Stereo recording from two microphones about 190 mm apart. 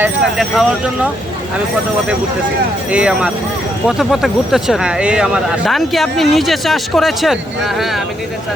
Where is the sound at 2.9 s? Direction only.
5° right (ahead or behind).